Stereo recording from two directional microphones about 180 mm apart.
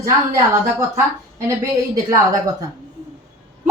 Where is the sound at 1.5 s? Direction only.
20° right (ahead or behind).